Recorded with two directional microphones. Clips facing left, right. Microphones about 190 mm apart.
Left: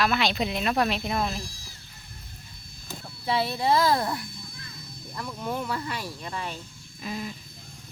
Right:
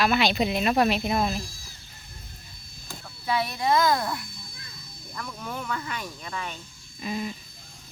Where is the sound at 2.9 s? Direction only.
30° left (ahead or behind).